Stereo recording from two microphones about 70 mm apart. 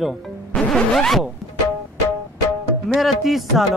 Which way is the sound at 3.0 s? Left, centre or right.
Centre.